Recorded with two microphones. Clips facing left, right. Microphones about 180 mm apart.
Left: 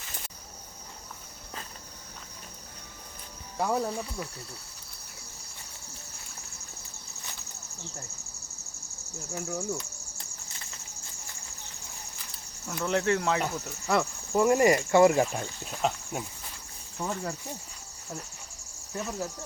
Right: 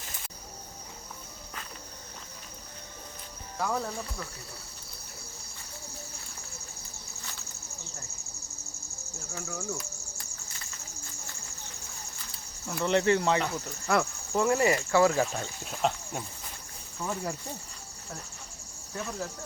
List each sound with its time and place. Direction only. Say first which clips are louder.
3.6 s speech: left 3 dB; 20° left (ahead or behind)
9.3 s cricket: left 4 dB; 15° left (ahead or behind)
12.6 s speech: right 2 dB; centre (ahead or behind)
14.4 s speech: left 4 dB; 15° left (ahead or behind)
15.4 s speech: even; centre (ahead or behind)
17.0 s speech: left 1 dB; 15° left (ahead or behind)
18.9 s speech: left 2 dB; 5° left (ahead or behind)